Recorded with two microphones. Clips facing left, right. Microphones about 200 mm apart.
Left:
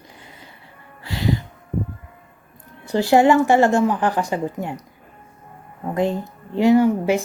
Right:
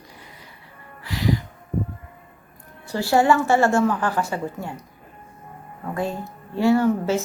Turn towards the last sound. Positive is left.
turn(degrees=15)  # may be behind; listen again after turning